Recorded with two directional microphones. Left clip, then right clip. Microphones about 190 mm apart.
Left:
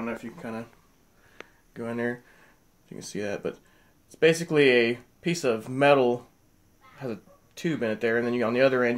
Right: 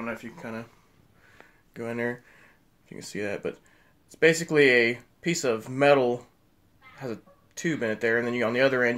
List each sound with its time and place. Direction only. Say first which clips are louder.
0.0 s speech: left 1 dB; 10° right (ahead or behind)
1.7 s speech: even; 20° right (ahead or behind)